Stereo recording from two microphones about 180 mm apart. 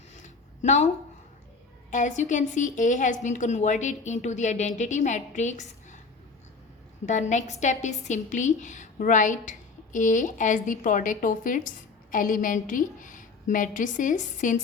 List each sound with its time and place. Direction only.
0.1 s a sound: 40° left (ahead or behind)
1.9 s a woman's voice: 45° left (ahead or behind)
7.0 s a woman's voice: 40° left (ahead or behind)